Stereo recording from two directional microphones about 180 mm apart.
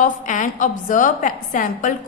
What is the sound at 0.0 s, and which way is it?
A woman's voice, 45° left (ahead or behind).